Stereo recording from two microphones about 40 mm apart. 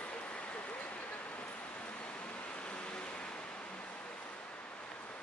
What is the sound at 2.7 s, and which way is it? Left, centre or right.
Vehicle, left.